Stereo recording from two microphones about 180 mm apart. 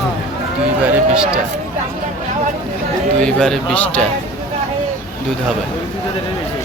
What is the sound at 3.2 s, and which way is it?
Speech, 5° left (ahead or behind).